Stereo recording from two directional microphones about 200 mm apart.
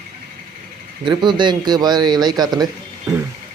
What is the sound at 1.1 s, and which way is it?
A man's voice, 25° right (ahead or behind).